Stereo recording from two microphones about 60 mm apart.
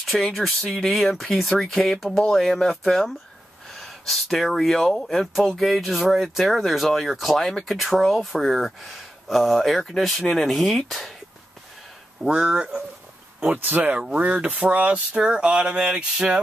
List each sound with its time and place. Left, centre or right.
0.0 s speech: centre
5.6 s speech: centre
12.2 s speech: centre
13.5 s speech: right
15.2 s speech: centre